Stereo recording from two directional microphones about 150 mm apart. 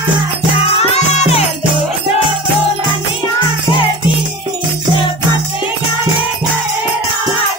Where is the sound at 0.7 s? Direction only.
45° left (ahead or behind).